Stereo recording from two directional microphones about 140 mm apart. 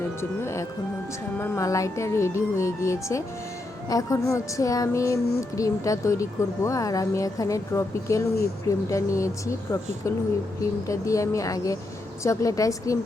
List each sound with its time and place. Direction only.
0.2 s child singing: 20° left (ahead or behind)
10.8 s child singing: 25° left (ahead or behind)